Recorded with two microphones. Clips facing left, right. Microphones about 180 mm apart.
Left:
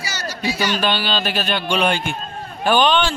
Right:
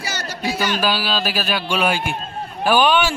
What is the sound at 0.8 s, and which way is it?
Speech, 5° right (ahead or behind).